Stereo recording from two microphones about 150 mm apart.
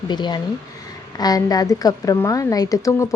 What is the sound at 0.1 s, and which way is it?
Speech, 30° left (ahead or behind).